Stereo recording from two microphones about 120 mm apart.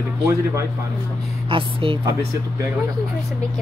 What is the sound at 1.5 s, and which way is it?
Speech, 45° right (ahead or behind).